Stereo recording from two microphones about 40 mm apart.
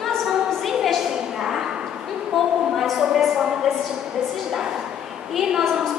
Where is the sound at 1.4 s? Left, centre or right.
Centre.